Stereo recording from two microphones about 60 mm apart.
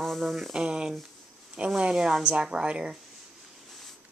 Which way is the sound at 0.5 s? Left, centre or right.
Centre.